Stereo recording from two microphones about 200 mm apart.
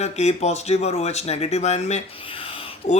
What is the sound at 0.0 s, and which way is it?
Speech, 35° left (ahead or behind).